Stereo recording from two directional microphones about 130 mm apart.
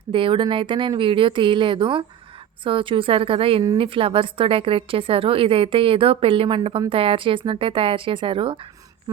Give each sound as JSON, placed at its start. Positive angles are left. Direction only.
{"t": 0.1, "sound": "a woman's voice", "side_deg": -40}